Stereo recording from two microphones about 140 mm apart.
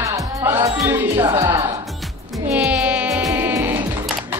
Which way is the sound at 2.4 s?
10° right (ahead or behind).